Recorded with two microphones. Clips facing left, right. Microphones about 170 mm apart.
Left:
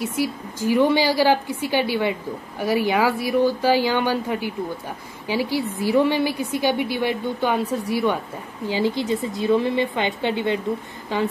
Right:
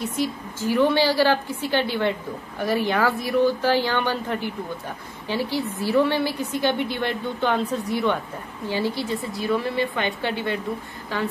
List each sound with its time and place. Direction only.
0.0 s a woman's voice: 10° left (ahead or behind)